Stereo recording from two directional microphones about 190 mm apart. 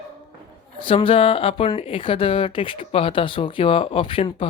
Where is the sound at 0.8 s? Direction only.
30° left (ahead or behind).